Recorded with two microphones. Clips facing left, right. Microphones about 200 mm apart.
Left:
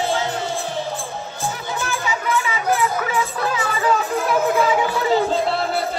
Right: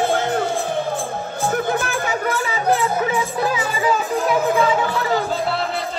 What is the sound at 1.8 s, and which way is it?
Music, 55° right (ahead or behind).